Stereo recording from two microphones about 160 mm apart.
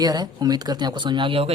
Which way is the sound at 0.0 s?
25° right (ahead or behind).